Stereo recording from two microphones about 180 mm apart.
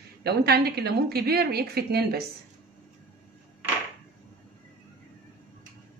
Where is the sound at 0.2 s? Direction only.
65° right (ahead or behind).